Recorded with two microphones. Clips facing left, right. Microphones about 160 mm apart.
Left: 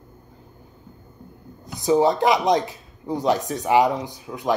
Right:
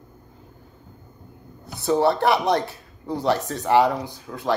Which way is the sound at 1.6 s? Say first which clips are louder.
Left 2 dB; 15° left (ahead or behind).